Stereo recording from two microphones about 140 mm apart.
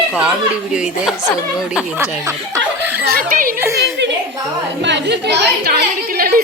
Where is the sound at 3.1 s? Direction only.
90° right.